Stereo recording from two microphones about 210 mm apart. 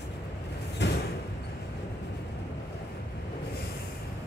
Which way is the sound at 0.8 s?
55° left (ahead or behind).